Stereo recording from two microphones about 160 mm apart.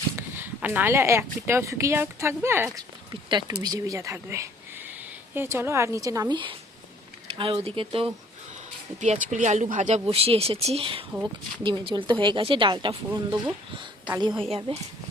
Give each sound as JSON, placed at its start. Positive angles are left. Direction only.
{"t": 0.2, "sound": "speech", "side_deg": -10}
{"t": 2.7, "sound": "a woman's voice", "side_deg": -30}
{"t": 9.0, "sound": "a woman's voice", "side_deg": -50}